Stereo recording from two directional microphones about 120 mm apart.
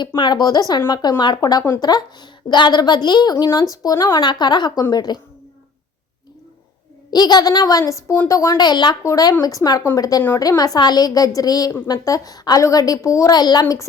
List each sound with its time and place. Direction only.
0.2 s a woman's voice: 40° left (ahead or behind)
7.1 s a woman's voice: 35° left (ahead or behind)